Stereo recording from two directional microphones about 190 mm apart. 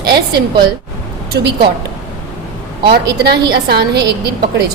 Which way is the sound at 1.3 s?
55° right (ahead or behind).